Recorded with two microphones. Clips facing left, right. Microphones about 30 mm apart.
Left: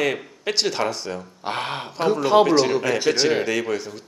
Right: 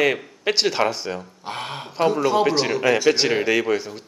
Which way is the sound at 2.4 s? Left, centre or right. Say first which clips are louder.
Left 1 dB; centre.